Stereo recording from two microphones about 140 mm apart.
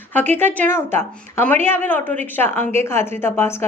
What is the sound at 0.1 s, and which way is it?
A woman's voice, 15° left (ahead or behind).